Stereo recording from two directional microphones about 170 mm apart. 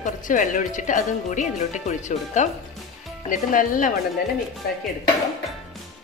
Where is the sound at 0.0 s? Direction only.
50° left (ahead or behind).